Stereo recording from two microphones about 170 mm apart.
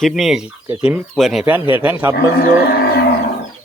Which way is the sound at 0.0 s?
Centre (ahead or behind).